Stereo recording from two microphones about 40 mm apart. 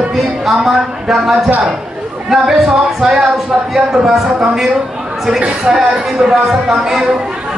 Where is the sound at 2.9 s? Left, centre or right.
Centre.